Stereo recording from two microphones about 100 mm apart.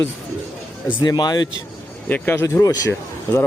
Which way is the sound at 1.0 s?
45° left (ahead or behind).